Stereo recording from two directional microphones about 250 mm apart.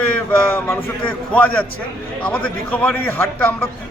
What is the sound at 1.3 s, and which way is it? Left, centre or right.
A man's voice, centre.